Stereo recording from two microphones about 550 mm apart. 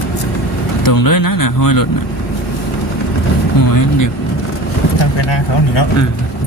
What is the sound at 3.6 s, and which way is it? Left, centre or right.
Speech, left.